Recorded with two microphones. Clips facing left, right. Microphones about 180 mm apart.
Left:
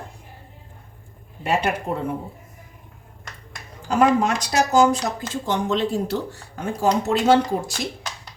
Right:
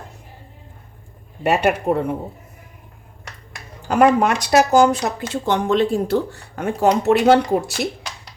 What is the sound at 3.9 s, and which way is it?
Speech, 65° right (ahead or behind).